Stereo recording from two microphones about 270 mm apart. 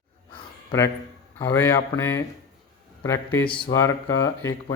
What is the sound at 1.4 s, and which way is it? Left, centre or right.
Speech, centre.